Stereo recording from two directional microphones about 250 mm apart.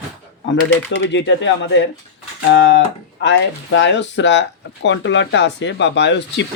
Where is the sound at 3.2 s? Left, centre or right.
Left.